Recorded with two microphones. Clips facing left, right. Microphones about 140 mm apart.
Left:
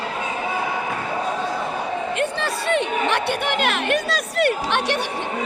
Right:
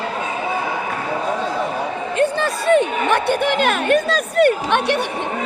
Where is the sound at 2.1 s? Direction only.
40° right (ahead or behind).